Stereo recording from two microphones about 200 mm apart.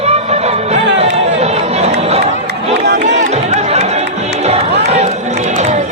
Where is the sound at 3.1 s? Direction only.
35° right (ahead or behind).